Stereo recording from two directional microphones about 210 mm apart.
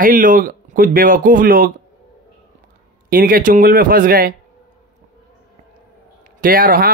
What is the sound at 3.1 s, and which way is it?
Speech, 45° right (ahead or behind).